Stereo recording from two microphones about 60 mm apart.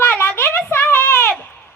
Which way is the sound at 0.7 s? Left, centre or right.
Left.